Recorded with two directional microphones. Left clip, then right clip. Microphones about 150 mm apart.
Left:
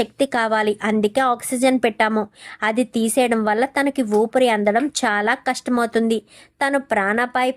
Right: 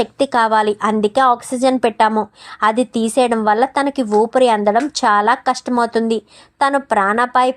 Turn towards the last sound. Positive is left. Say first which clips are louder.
# right 5 dB
turn(degrees=5)  # may be behind; listen again after turning